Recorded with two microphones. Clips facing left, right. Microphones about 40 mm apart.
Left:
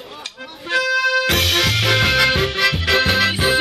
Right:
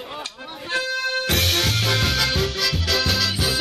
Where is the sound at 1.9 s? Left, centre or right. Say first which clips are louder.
Left 9 dB; left.